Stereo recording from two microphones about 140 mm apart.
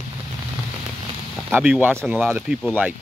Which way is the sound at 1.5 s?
15° right (ahead or behind).